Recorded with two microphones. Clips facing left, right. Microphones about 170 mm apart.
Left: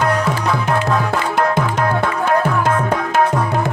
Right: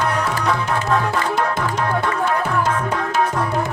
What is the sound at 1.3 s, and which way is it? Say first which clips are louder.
Music: left 4 dB; 55° left (ahead or behind).